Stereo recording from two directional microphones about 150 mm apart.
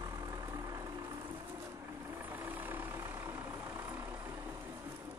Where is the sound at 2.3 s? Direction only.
15° right (ahead or behind).